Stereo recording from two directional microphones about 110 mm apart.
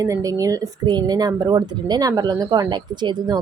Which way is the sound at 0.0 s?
30° right (ahead or behind).